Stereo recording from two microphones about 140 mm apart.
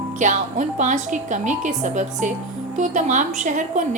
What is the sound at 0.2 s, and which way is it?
A woman's voice, 60° right (ahead or behind).